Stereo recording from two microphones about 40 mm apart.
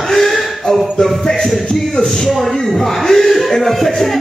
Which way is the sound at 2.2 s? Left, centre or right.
Centre.